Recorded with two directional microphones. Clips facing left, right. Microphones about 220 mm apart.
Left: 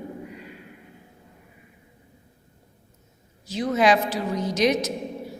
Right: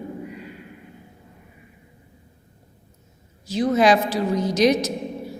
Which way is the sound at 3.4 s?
35° right (ahead or behind).